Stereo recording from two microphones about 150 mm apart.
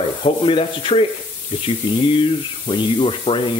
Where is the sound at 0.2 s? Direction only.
35° left (ahead or behind).